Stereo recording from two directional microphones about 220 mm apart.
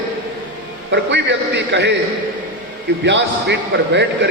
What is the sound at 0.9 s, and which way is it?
A man's voice, 50° right (ahead or behind).